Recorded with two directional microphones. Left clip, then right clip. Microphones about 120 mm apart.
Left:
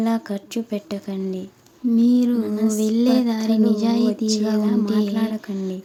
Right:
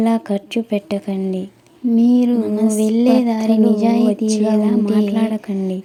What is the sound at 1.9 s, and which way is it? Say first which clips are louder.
Music: right 4 dB; 25° right (ahead or behind).